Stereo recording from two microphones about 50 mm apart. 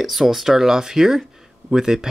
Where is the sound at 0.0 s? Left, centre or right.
Centre.